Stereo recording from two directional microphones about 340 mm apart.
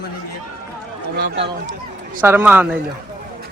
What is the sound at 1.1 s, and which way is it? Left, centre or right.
Speech, right.